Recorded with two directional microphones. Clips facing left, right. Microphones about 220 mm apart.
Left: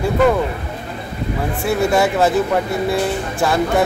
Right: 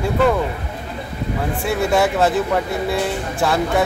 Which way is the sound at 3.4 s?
Centre (ahead or behind).